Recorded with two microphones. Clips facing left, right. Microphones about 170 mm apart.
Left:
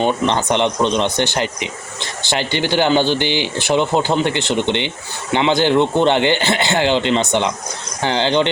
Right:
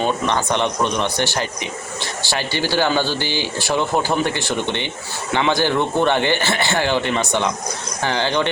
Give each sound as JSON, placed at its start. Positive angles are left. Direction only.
{"t": 0.0, "sound": "speech", "side_deg": 20}